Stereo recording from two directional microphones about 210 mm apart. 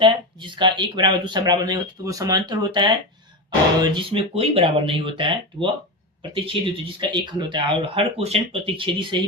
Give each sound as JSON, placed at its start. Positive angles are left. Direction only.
{"t": 0.0, "sound": "speech", "side_deg": -20}